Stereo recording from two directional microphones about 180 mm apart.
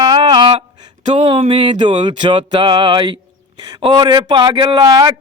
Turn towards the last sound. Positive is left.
turn(degrees=-20)  # may be behind; listen again after turning